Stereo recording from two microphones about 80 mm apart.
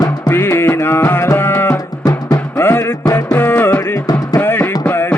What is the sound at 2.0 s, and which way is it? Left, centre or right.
Music, left.